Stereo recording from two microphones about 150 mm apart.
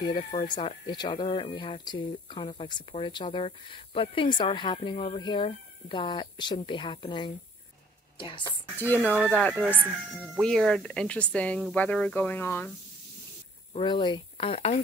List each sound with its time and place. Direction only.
0.1 s speech: 40° left (ahead or behind)
8.7 s speech: 15° left (ahead or behind)
9.7 s speech: 10° right (ahead or behind)
10.4 s speech: centre (ahead or behind)
13.7 s speech: 30° left (ahead or behind)